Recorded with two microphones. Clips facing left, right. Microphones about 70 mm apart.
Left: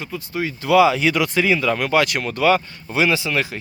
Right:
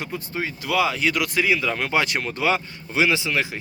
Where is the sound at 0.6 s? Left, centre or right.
Centre.